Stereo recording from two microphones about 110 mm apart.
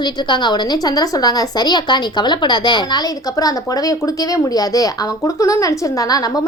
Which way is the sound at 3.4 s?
35° left (ahead or behind).